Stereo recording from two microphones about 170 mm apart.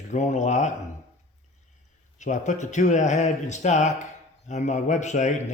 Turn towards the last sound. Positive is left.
turn(degrees=45)  # may be behind; listen again after turning